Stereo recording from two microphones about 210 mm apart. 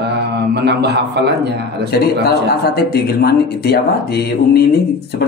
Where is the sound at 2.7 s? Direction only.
50° left (ahead or behind).